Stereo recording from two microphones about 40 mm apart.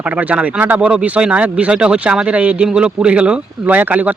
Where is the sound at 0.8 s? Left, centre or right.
Right.